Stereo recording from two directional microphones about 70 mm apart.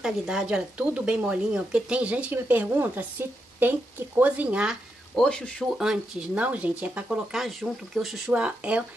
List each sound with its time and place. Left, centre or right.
0.0 s speech: centre
5.1 s a man's voice: centre
5.7 s speech: centre
6.4 s speech: right
7.3 s speech: centre
8.3 s speech: centre